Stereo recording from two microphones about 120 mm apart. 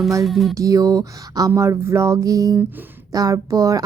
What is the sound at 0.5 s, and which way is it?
A woman's voice, 30° right (ahead or behind).